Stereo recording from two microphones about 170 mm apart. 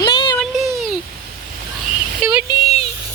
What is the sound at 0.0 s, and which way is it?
Child singing, 30° left (ahead or behind).